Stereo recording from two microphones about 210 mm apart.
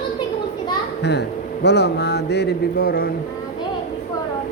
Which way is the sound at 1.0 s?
55° left (ahead or behind).